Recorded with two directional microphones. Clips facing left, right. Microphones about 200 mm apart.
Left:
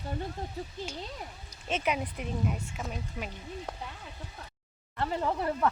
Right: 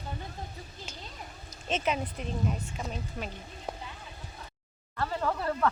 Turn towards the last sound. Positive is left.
turn(degrees=20)  # may be behind; listen again after turning